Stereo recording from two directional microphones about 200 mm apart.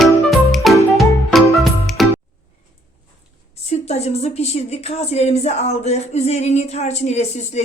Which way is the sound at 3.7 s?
30° left (ahead or behind).